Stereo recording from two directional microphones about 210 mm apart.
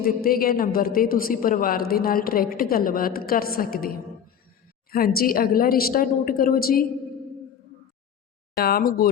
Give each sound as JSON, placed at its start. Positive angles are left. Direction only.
{"t": 0.0, "sound": "a woman's voice", "side_deg": 45}
{"t": 8.5, "sound": "a woman's voice", "side_deg": 45}